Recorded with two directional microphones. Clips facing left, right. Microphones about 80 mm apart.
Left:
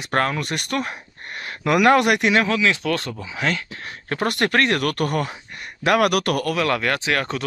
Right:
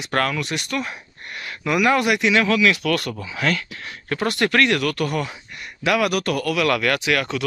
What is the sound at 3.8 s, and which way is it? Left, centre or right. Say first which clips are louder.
Speech: even; left.